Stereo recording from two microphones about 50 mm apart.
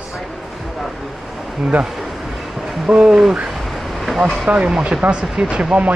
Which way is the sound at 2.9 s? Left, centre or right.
Centre.